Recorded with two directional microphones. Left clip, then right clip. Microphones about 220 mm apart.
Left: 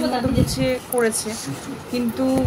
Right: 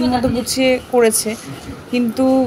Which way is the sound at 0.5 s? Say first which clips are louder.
Right 7 dB; 30° right (ahead or behind).